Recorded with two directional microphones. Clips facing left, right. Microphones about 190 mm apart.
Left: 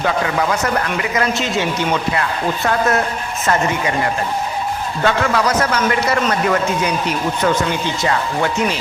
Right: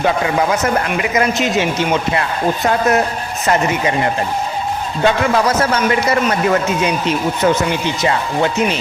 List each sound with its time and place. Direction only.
1.1 s speech: 20° right (ahead or behind)
2.6 s speech: 20° right (ahead or behind)